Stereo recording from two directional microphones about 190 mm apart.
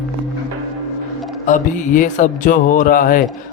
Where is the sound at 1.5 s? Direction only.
40° left (ahead or behind).